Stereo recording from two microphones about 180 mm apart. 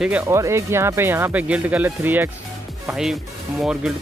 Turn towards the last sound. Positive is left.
turn(degrees=0)  # may be behind; listen again after turning